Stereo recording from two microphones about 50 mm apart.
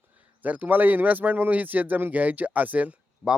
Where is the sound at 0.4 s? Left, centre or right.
Right.